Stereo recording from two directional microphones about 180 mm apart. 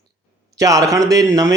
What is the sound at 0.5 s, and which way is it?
Speech, 20° right (ahead or behind).